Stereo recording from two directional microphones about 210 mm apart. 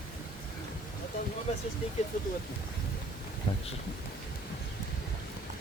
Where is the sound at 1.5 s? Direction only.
30° left (ahead or behind).